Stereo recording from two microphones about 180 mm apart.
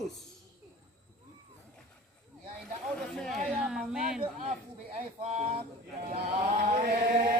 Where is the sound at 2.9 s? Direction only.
5° left (ahead or behind).